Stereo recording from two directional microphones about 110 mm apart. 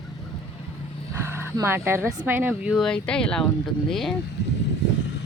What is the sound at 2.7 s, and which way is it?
Speech, 5° left (ahead or behind).